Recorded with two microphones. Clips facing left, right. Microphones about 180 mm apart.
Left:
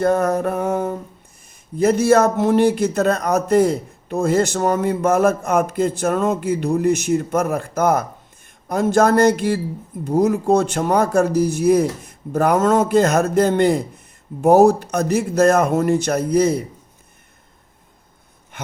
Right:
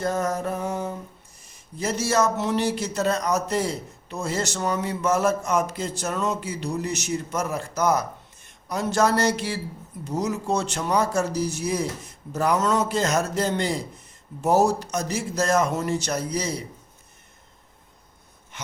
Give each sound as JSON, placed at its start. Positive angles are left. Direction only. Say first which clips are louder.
{"t": 0.0, "sound": "music", "louder": "left 8 dB", "side_deg": 60}
{"t": 1.5, "sound": "speech", "louder": "left 12 dB", "side_deg": 55}
{"t": 18.5, "sound": "a sound", "louder": "left 5 dB", "side_deg": 55}